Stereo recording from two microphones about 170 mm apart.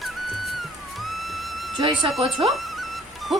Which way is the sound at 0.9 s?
Centre (ahead or behind).